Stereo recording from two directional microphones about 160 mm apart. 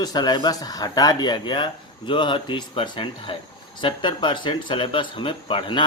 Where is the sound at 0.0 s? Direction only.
25° left (ahead or behind).